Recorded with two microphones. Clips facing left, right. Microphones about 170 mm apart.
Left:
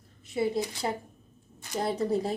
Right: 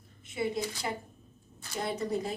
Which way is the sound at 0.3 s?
35° left (ahead or behind).